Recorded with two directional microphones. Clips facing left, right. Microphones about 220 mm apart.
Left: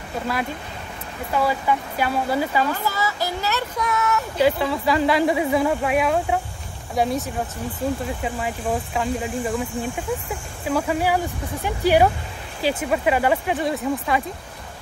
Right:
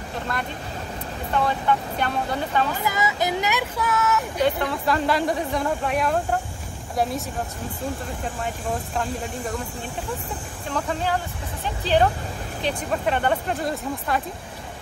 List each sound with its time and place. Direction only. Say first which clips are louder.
1.3 s speech: left 1 dB; 5° left (ahead or behind)
2.8 s speech: right 1 dB; 15° right (ahead or behind)
3.8 s speech: even; centre (ahead or behind)
8.4 s speech: left 2 dB; centre (ahead or behind)
10.7 s speech: left 5 dB; 10° left (ahead or behind)